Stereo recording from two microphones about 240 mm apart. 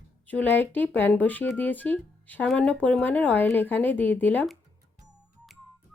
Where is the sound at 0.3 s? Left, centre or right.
Centre.